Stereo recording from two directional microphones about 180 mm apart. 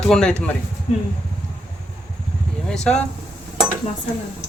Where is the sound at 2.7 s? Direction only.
5° left (ahead or behind).